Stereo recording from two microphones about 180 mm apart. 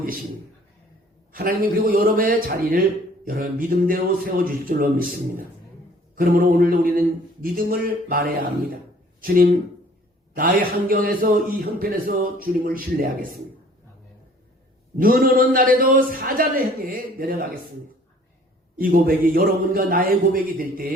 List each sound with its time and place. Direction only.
1.3 s a man's voice: 50° right (ahead or behind)
14.9 s a man's voice: 50° right (ahead or behind)
18.8 s a man's voice: 50° right (ahead or behind)